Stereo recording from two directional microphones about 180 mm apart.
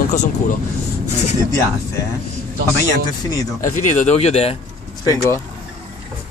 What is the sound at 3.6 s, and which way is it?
Speech, 40° left (ahead or behind).